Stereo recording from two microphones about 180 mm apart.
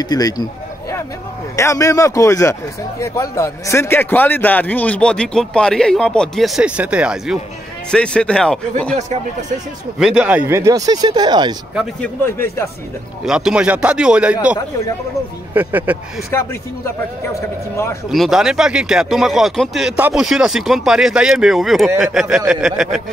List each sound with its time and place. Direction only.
0.0 s a sound: 20° left (ahead or behind)
1.6 s a man's voice: 15° left (ahead or behind); by 7.3 s 5° right (ahead or behind)
7.9 s a man's voice: 5° left (ahead or behind)
9.9 s speech: 5° right (ahead or behind); by 11.5 s 25° right (ahead or behind)
11.7 s a man's voice: 5° right (ahead or behind)
12.2 s a man's voice: 15° left (ahead or behind)
13.2 s a man's voice: 5° right (ahead or behind)
16.3 s a man's voice: 15° left (ahead or behind)
18.1 s a man's voice: centre (ahead or behind)